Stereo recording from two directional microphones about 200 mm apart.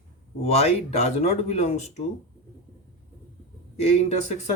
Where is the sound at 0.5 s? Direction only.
30° left (ahead or behind).